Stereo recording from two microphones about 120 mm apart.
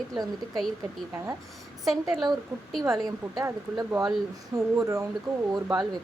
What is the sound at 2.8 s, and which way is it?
A woman's voice, 25° right (ahead or behind).